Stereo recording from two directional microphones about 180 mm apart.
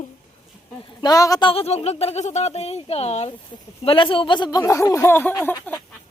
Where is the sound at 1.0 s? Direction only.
20° left (ahead or behind).